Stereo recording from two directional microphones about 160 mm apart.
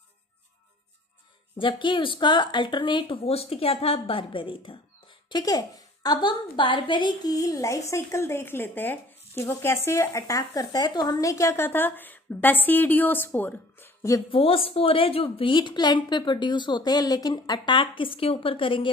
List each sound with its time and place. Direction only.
1.6 s a woman's voice: 30° left (ahead or behind)
14.3 s speech: 35° left (ahead or behind)